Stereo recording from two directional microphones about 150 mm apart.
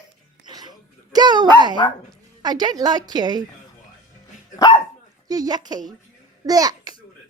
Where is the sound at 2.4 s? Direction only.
25° right (ahead or behind).